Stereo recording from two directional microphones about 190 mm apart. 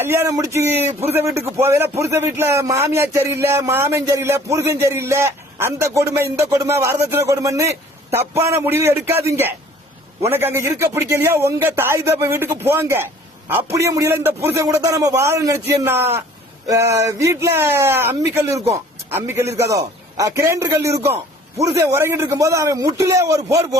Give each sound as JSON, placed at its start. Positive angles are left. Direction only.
{"t": 0.0, "sound": "a man's voice", "side_deg": -10}